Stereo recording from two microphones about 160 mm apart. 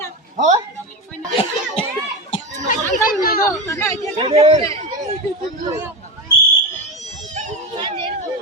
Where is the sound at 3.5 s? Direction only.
20° left (ahead or behind).